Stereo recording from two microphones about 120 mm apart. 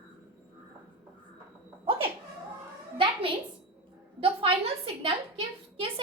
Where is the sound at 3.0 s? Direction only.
45° right (ahead or behind).